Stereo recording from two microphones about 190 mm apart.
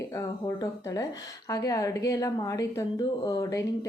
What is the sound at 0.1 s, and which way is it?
Speech, 15° left (ahead or behind).